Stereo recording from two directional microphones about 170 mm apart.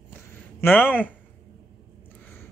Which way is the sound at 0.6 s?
10° left (ahead or behind).